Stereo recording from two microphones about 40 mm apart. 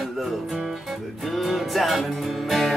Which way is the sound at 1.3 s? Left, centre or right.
Centre.